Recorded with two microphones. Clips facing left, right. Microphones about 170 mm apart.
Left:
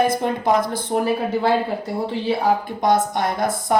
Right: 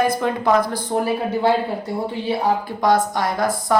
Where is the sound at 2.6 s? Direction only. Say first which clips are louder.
Right 1 dB; 20° left (ahead or behind).